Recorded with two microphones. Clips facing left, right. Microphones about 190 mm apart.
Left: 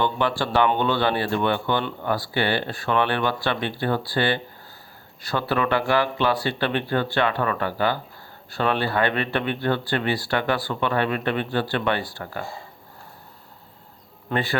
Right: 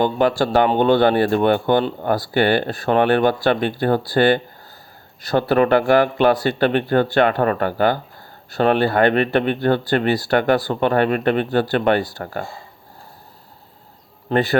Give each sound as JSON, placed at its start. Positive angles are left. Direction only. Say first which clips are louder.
{"t": 0.0, "sound": "speech", "louder": "right 6 dB", "side_deg": -40}
{"t": 14.3, "sound": "speech", "louder": "right 8 dB", "side_deg": -45}